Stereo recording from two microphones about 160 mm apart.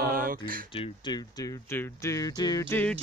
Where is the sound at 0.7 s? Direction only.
30° left (ahead or behind).